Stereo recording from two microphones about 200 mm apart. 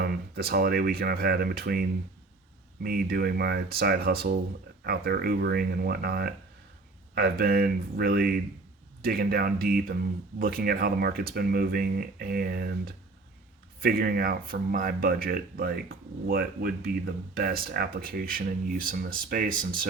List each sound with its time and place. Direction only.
0.0 s speech: 50° right (ahead or behind)